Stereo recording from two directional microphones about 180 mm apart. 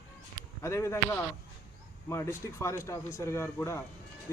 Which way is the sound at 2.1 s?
15° left (ahead or behind).